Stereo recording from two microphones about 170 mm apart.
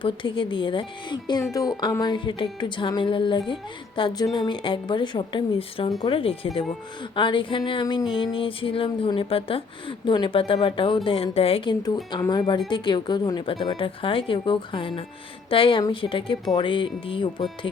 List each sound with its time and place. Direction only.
0.0 s music: 30° left (ahead or behind)
6.0 s speech: 30° left (ahead or behind)
7.2 s music: 30° left (ahead or behind)
8.1 s speech: 30° left (ahead or behind)
10.1 s music: 30° left (ahead or behind)